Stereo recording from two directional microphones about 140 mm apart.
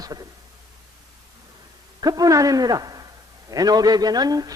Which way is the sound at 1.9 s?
25° right (ahead or behind).